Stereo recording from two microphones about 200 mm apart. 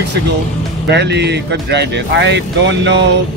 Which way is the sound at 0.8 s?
60° right (ahead or behind).